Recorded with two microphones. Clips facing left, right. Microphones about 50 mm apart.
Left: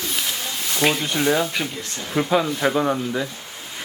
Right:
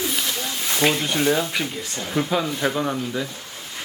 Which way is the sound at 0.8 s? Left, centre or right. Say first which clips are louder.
Even; centre.